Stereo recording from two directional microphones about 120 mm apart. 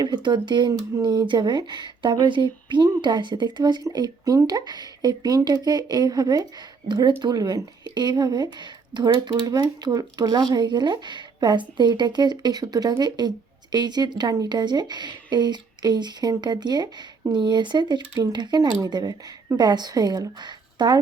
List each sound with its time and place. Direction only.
0.0 s speech: 35° right (ahead or behind)